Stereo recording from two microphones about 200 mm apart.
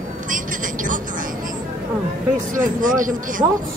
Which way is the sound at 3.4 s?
20° right (ahead or behind).